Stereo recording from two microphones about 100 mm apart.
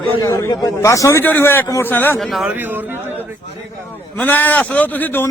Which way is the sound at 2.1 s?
Centre (ahead or behind).